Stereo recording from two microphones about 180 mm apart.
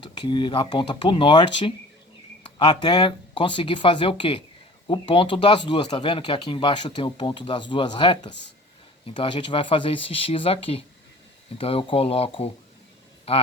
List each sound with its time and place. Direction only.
0.0 s speech: 25° left (ahead or behind)